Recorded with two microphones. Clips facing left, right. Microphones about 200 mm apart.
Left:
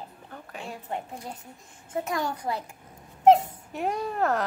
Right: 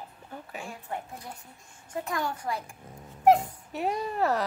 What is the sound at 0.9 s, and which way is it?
A child's voice, 20° left (ahead or behind).